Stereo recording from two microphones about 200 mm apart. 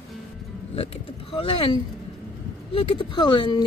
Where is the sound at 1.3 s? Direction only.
25° left (ahead or behind).